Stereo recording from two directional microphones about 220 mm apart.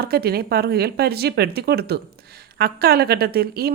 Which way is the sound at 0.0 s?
45° right (ahead or behind).